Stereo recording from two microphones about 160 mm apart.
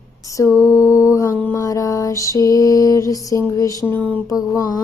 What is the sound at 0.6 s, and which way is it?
Mantra, 15° left (ahead or behind).